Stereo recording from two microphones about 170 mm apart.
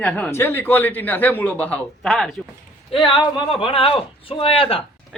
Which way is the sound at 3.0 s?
30° left (ahead or behind).